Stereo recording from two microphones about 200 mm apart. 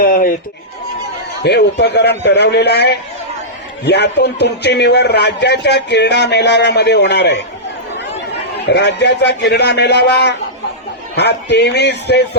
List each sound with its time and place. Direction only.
0.0 s speech: 45° left (ahead or behind)
1.4 s a man's voice: 55° left (ahead or behind)
8.6 s a man's voice: 60° left (ahead or behind)